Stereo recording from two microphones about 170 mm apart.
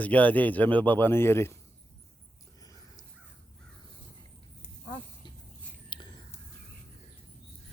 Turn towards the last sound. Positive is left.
turn(degrees=25)  # may be behind; listen again after turning